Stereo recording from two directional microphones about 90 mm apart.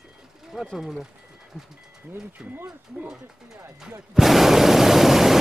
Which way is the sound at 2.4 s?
15° right (ahead or behind).